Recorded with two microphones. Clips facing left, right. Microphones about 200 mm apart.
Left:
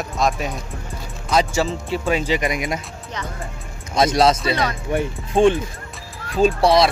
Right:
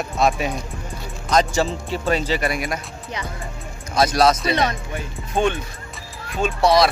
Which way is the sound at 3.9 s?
25° left (ahead or behind).